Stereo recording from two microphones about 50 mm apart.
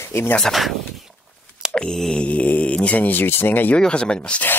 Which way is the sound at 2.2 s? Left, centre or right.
Left.